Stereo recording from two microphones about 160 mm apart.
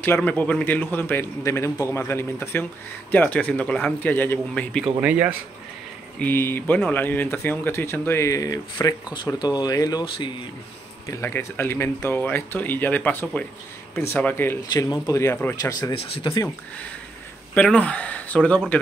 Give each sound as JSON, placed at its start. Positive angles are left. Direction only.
{"t": 0.0, "sound": "speech", "side_deg": 10}
{"t": 4.8, "sound": "speech", "side_deg": -10}
{"t": 6.1, "sound": "speech", "side_deg": 10}
{"t": 11.1, "sound": "speech", "side_deg": 15}
{"t": 14.7, "sound": "speech", "side_deg": 25}
{"t": 17.6, "sound": "speech", "side_deg": 5}